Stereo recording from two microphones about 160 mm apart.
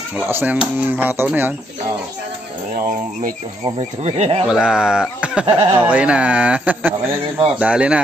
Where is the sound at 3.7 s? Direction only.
40° right (ahead or behind).